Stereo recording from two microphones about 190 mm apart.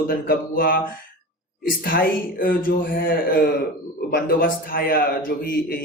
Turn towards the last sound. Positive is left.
turn(degrees=50)  # may be behind; listen again after turning